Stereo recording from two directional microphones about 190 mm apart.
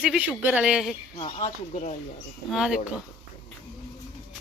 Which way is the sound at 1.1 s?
35° left (ahead or behind).